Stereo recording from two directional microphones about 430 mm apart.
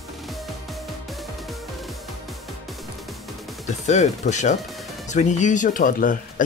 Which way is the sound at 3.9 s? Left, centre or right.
Centre.